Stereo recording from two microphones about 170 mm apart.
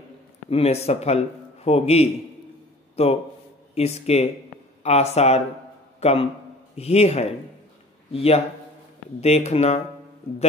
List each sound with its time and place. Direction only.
0.5 s speech: 35° left (ahead or behind)
5.9 s a sound: 35° left (ahead or behind)
6.8 s speech: 40° left (ahead or behind)